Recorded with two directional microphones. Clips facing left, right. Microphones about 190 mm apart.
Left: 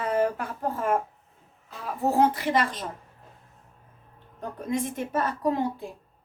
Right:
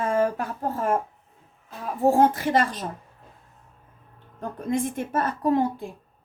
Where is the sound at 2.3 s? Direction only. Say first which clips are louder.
Right 2 dB; 45° right (ahead or behind).